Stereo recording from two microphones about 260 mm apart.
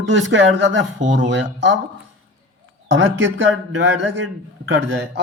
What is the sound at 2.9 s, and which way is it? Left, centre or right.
A man's voice, right.